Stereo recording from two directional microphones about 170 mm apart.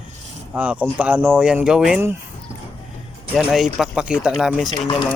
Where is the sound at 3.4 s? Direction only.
5° right (ahead or behind).